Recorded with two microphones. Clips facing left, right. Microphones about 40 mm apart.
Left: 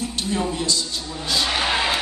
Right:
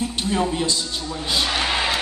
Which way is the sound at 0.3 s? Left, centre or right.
Right.